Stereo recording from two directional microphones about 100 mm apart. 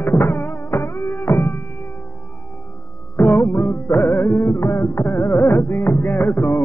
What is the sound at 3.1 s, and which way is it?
Music, 20° left (ahead or behind).